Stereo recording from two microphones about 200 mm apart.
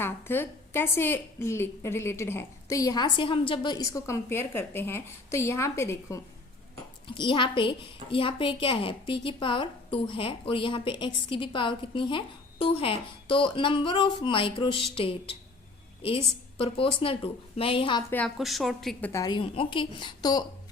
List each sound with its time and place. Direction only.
0.0 s a woman's voice: 10° left (ahead or behind)
18.1 s a woman's voice: 5° left (ahead or behind)
19.1 s a woman's voice: 20° left (ahead or behind)